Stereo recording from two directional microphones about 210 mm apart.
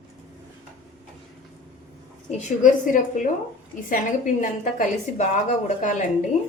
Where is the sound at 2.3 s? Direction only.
35° left (ahead or behind).